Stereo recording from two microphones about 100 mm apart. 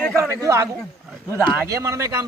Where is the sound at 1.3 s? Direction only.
20° right (ahead or behind).